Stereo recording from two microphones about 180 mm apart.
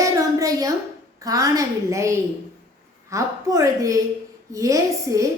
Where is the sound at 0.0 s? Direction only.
20° right (ahead or behind).